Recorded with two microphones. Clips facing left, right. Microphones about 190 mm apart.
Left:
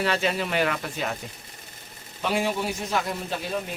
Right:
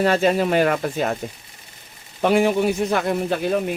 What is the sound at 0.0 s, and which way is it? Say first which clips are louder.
Speech: right 8 dB; 45° right (ahead or behind).